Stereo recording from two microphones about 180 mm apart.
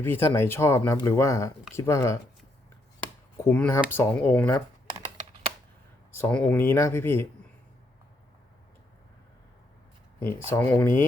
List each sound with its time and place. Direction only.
0.0 s speech: 10° left (ahead or behind)
6.1 s speech: 10° left (ahead or behind)
10.5 s speech: 10° left (ahead or behind)